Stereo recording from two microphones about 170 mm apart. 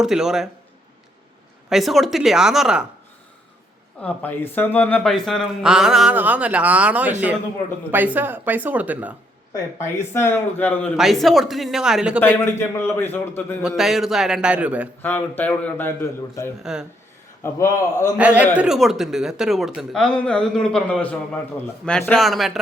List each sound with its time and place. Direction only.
0.0 s speech: 5° right (ahead or behind)
1.7 s speech: centre (ahead or behind)
4.0 s speech: 10° left (ahead or behind); by 9.1 s 10° right (ahead or behind)
9.5 s a man's voice: 15° left (ahead or behind)
10.9 s speech: centre (ahead or behind)
12.4 s a man's voice: 15° left (ahead or behind)
13.6 s speech: 5° right (ahead or behind)
15.0 s a man's voice: 10° left (ahead or behind)
18.2 s speech: 10° right (ahead or behind)